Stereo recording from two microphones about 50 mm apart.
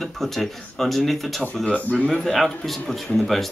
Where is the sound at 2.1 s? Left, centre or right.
Centre.